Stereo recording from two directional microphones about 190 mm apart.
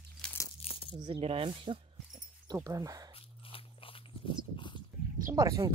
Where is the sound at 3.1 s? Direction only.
30° left (ahead or behind).